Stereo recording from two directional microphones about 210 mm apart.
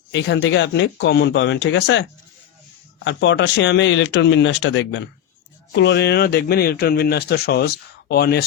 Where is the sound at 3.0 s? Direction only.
60° left (ahead or behind).